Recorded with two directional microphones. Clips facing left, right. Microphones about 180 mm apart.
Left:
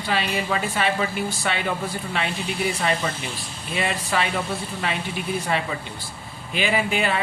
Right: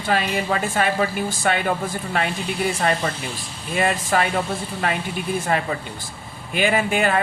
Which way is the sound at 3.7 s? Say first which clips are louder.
Right 4 dB; 45° right (ahead or behind).